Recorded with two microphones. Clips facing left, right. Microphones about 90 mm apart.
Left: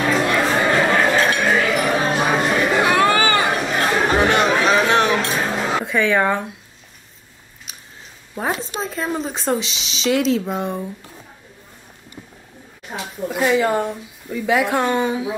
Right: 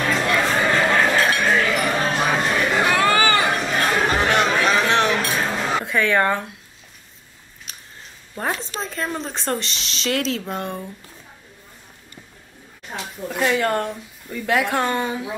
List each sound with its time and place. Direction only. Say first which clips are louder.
0.0 s chatter: left 2 dB; 5° left (ahead or behind)
1.2 s chink: left 1 dB; 5° left (ahead or behind)
2.9 s chatter: left 2 dB; 20° left (ahead or behind)
3.2 s chatter: left 1 dB; 5° left (ahead or behind)
5.4 s a sound: left 2 dB; 5° left (ahead or behind)
7.7 s a sound: even; 5° left (ahead or behind)
8.4 s speech: left 2 dB; 5° left (ahead or behind)
12.8 s speech: left 3 dB; 5° left (ahead or behind)